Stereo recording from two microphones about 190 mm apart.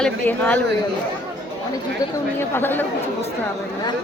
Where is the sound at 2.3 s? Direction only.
10° left (ahead or behind).